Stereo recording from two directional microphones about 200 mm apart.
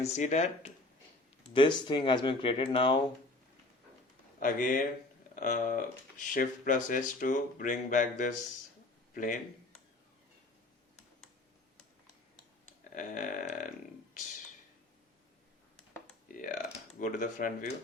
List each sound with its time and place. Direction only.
0.0 s speech: 35° left (ahead or behind)
1.5 s speech: 25° left (ahead or behind)
4.4 s speech: 40° left (ahead or behind)
12.9 s speech: 40° left (ahead or behind)
16.3 s speech: 40° left (ahead or behind)